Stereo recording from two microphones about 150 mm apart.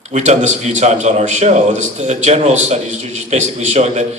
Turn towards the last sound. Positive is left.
turn(degrees=-50)  # may be behind; listen again after turning